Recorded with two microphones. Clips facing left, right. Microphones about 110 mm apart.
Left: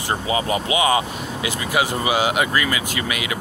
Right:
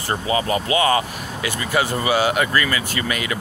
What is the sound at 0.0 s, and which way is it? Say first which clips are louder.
Speech: right 1 dB; 15° left (ahead or behind).